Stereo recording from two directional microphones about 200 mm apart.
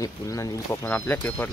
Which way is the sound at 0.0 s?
15° left (ahead or behind).